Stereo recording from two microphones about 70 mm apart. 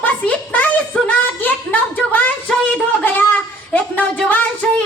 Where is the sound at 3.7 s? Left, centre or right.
Left.